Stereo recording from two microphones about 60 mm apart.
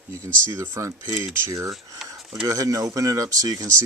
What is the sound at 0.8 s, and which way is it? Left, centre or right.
A man's voice, right.